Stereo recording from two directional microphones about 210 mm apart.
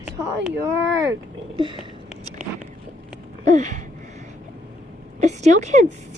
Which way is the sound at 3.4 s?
35° right (ahead or behind).